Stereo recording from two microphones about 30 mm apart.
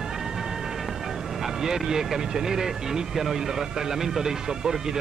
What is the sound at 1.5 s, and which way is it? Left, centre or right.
Speech, centre.